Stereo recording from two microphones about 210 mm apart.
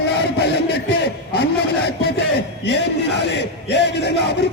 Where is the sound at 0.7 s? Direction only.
50° left (ahead or behind).